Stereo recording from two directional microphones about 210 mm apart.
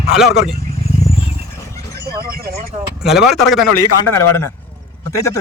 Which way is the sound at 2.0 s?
45° right (ahead or behind).